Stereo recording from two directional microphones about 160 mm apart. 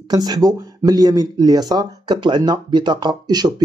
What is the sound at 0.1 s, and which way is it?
Speech, 25° right (ahead or behind).